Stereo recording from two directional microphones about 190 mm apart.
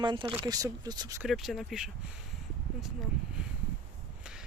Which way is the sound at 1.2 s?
Centre (ahead or behind).